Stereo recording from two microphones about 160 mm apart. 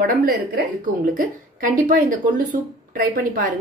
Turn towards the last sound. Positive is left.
turn(degrees=-60)  # may be behind; listen again after turning